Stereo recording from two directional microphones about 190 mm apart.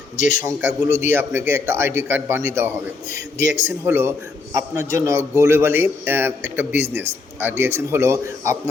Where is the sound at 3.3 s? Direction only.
40° left (ahead or behind).